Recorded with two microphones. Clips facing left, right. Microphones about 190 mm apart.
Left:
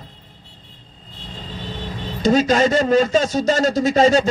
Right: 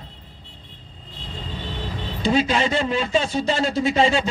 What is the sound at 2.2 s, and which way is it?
A man's voice, 40° left (ahead or behind).